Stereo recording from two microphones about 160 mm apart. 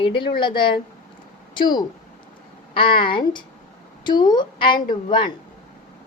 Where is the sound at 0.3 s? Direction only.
30° left (ahead or behind).